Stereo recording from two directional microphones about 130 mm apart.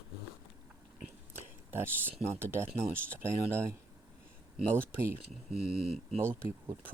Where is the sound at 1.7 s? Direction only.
15° right (ahead or behind).